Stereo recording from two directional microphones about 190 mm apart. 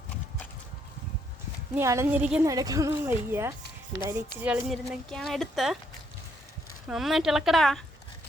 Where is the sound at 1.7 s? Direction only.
15° right (ahead or behind).